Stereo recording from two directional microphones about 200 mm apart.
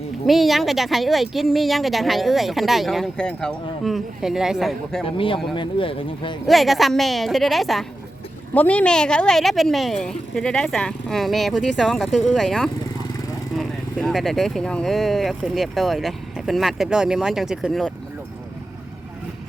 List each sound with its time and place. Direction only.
0.3 s speech: centre (ahead or behind)
5.0 s speech: 25° left (ahead or behind)
6.5 s speech: centre (ahead or behind)